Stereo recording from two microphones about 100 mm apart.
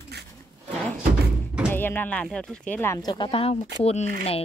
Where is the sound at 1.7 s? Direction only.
20° left (ahead or behind).